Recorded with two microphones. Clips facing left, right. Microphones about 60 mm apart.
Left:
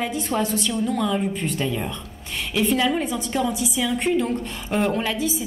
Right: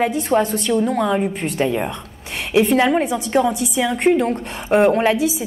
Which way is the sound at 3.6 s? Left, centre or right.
Right.